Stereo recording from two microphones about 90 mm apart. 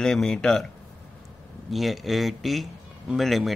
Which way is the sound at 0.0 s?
5° left (ahead or behind).